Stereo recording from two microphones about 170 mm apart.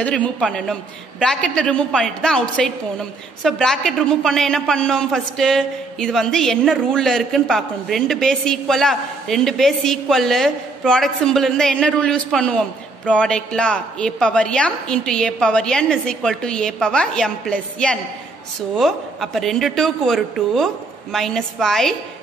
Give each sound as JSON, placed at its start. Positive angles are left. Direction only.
{"t": 0.0, "sound": "a woman's voice", "side_deg": 5}